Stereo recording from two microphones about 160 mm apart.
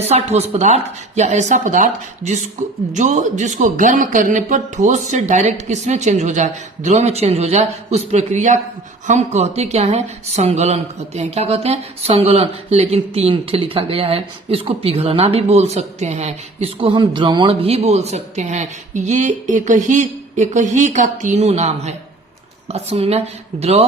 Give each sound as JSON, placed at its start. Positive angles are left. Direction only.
{"t": 0.0, "sound": "speech", "side_deg": -40}